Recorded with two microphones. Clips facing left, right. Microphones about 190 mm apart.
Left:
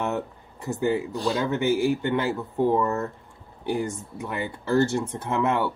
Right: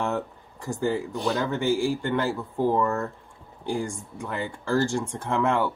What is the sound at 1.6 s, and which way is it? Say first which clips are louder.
Speech: left 2 dB; 65° left (ahead or behind).